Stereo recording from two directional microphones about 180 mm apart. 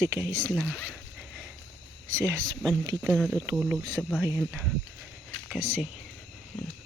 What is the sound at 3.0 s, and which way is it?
Speech, 5° right (ahead or behind).